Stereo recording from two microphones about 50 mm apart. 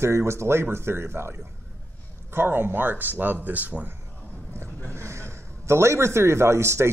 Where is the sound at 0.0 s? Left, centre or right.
Right.